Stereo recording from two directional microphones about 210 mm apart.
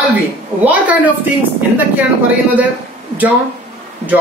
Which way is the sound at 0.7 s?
5° right (ahead or behind).